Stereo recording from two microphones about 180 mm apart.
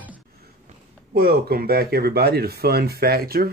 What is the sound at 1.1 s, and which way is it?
Speech, 55° right (ahead or behind).